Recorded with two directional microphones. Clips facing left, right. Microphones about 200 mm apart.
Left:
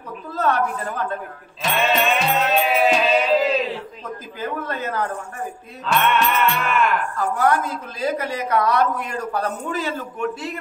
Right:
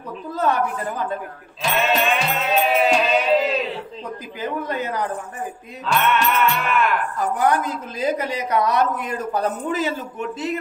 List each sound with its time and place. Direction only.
0.4 s a woman's voice: 15° right (ahead or behind)
1.6 s music: centre (ahead or behind)
4.4 s a woman's voice: 15° right (ahead or behind)
5.9 s music: centre (ahead or behind)
7.2 s a woman's voice: 15° right (ahead or behind)